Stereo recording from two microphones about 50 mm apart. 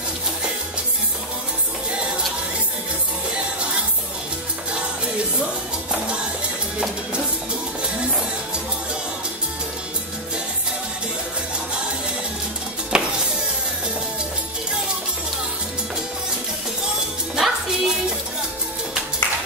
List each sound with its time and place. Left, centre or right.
5.9 s music: right
12.9 s music: centre
17.4 s music: centre